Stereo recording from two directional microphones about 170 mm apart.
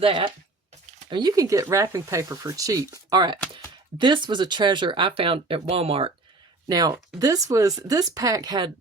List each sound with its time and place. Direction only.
0.0 s speech: 30° right (ahead or behind)
6.7 s speech: 20° right (ahead or behind)